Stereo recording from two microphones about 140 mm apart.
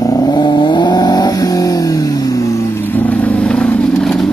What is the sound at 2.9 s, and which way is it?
Vehicle, 10° left (ahead or behind).